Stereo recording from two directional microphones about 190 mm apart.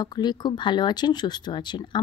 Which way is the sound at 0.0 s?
20° left (ahead or behind).